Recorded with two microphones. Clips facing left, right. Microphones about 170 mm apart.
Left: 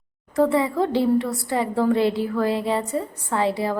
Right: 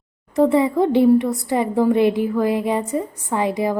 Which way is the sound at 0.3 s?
20° right (ahead or behind).